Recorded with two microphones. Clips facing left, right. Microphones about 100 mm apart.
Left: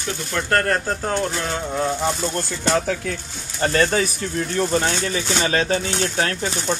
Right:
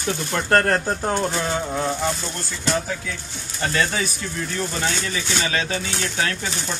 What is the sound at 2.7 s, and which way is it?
Speech, 65° left (ahead or behind).